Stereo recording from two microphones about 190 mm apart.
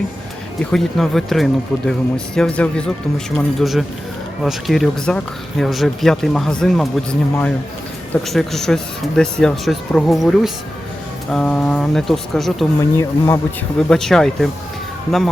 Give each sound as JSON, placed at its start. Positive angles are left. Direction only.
{"t": 0.6, "sound": "speech", "side_deg": 0}
{"t": 13.0, "sound": "speech", "side_deg": 15}
{"t": 13.7, "sound": "speech", "side_deg": 5}